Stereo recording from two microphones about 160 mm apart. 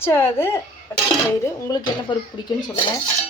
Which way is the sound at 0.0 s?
15° left (ahead or behind).